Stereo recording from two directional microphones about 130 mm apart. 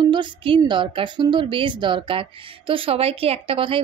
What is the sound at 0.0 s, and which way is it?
A woman's voice, 35° right (ahead or behind).